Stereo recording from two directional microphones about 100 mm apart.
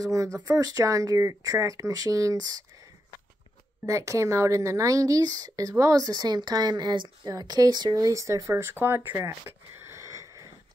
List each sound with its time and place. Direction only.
0.0 s speech: 35° right (ahead or behind)
3.8 s speech: 30° right (ahead or behind)